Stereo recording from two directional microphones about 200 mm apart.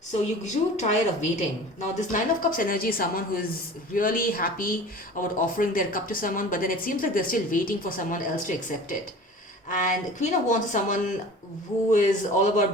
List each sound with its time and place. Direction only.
0.1 s speech: 35° left (ahead or behind)